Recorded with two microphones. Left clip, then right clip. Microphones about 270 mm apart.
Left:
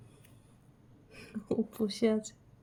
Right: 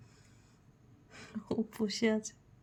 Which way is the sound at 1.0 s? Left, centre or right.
Right.